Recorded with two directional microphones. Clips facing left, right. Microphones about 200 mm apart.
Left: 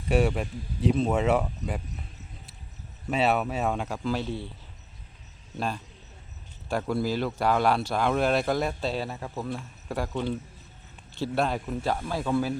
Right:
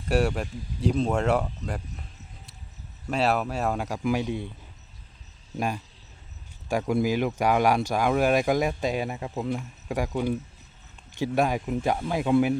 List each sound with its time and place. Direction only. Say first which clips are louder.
0.1 s speech: even; centre (ahead or behind)
3.1 s speech: even; centre (ahead or behind); by 4.4 s 15° right (ahead or behind)
5.5 s speech: right 2 dB; 10° right (ahead or behind)